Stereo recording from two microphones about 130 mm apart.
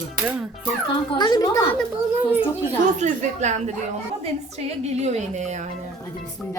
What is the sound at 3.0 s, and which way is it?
Speech, 65° right (ahead or behind).